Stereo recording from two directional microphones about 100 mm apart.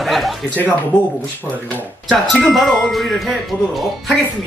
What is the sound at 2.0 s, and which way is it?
Speech, centre (ahead or behind).